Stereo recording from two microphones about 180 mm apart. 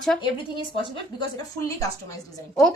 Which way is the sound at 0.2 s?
25° left (ahead or behind).